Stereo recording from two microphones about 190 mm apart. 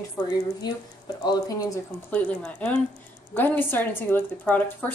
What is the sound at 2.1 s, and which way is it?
A woman's voice, 5° left (ahead or behind).